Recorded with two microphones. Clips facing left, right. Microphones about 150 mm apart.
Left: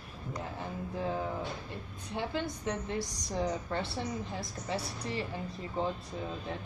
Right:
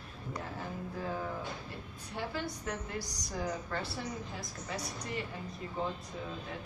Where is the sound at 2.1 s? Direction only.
20° left (ahead or behind).